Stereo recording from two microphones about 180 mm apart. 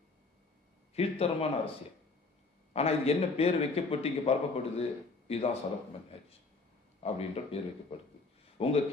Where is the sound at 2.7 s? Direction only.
35° left (ahead or behind).